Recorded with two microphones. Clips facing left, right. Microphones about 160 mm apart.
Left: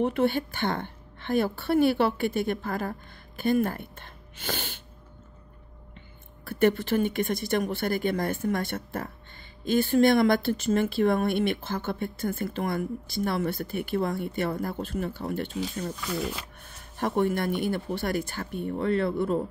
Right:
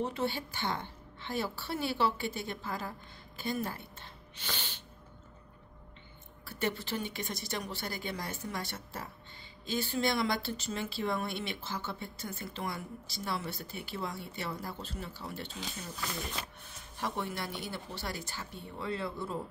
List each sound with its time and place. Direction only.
0.0 s a woman's voice: 60° left (ahead or behind)
6.4 s a woman's voice: 55° left (ahead or behind)
16.9 s a woman's voice: 55° left (ahead or behind)